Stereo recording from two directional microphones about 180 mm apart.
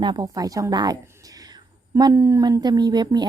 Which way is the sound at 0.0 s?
25° right (ahead or behind).